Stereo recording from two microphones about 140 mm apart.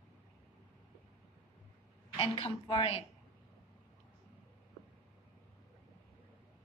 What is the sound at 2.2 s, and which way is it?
Speech, 40° left (ahead or behind).